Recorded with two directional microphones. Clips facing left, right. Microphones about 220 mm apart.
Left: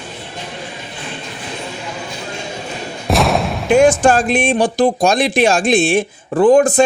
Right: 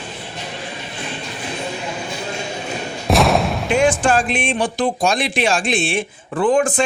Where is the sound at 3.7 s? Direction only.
45° left (ahead or behind).